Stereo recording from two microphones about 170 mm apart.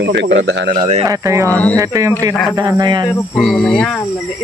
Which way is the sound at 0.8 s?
40° right (ahead or behind).